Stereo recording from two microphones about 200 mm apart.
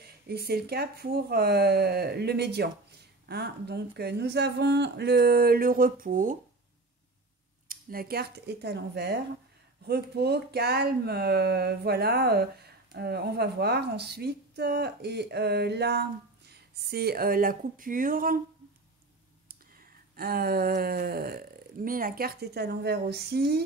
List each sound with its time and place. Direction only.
0.0 s speech: 50° right (ahead or behind)
7.6 s speech: 45° right (ahead or behind)
20.2 s speech: 50° right (ahead or behind)